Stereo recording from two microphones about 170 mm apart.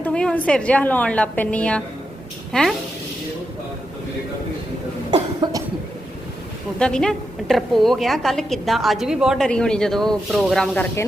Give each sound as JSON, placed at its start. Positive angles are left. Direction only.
{"t": 0.0, "sound": "a woman's voice", "side_deg": 5}
{"t": 5.1, "sound": "cough", "side_deg": -25}
{"t": 6.7, "sound": "a woman's voice", "side_deg": 5}